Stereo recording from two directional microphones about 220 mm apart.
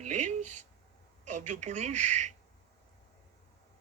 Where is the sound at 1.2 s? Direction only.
35° right (ahead or behind).